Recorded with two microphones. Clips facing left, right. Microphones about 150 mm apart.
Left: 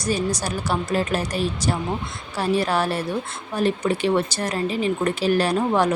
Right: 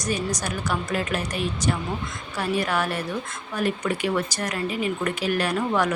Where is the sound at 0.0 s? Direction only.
30° left (ahead or behind).